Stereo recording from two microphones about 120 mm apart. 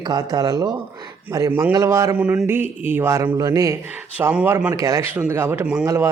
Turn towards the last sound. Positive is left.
turn(degrees=-25)  # may be behind; listen again after turning